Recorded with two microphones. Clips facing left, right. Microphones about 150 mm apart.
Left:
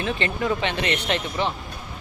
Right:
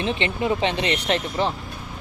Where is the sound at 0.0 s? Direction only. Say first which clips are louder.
Right 1 dB; 20° right (ahead or behind).